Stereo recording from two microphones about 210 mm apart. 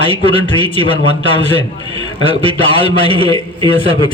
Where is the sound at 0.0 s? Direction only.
25° left (ahead or behind).